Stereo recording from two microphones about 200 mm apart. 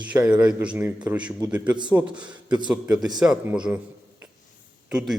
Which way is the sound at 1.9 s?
20° right (ahead or behind).